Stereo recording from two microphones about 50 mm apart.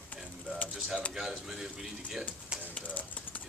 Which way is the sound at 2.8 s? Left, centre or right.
Left.